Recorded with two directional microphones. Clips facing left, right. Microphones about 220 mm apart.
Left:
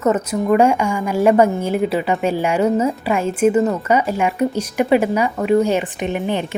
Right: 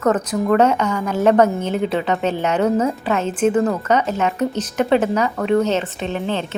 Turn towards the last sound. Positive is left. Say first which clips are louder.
# left 2 dB
turn(degrees=15)  # may be behind; listen again after turning